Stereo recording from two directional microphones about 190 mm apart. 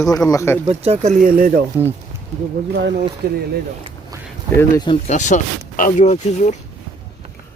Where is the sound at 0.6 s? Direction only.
35° right (ahead or behind).